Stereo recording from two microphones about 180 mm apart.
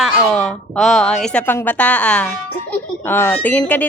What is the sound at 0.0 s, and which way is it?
A woman's voice, centre (ahead or behind).